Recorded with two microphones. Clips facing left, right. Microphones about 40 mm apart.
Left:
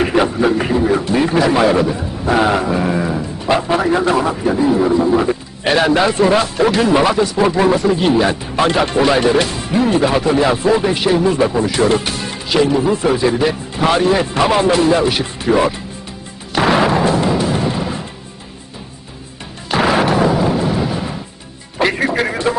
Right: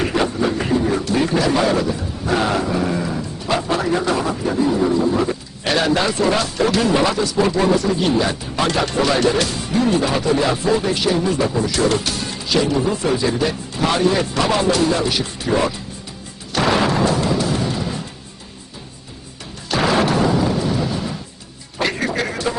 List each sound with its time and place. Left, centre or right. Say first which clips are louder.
0.0 s a man's voice: left 5 dB; centre
16.6 s music: left 3 dB; centre
19.7 s music: left 3 dB; centre
21.8 s a sound: left 5 dB; centre